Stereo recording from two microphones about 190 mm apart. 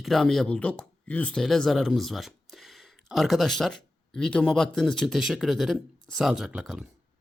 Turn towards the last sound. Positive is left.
turn(degrees=-5)  # may be behind; listen again after turning